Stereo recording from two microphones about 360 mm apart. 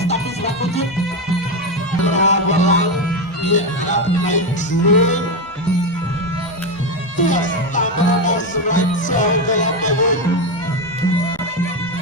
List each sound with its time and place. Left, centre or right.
0.0 s music: centre
2.0 s speech: centre
7.2 s speech: left